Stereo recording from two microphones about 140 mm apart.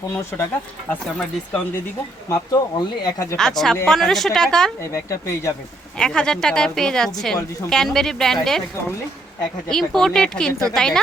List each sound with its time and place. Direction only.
2.3 s speech: 25° left (ahead or behind)
3.3 s a woman's voice: 5° left (ahead or behind)
4.8 s speech: 20° left (ahead or behind)
6.0 s a woman's voice: 5° left (ahead or behind)
9.6 s a woman's voice: 5° left (ahead or behind)